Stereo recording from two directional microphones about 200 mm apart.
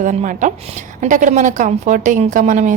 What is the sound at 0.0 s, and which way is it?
A woman's voice, 40° right (ahead or behind).